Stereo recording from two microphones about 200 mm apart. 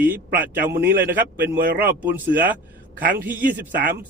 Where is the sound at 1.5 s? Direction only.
50° right (ahead or behind).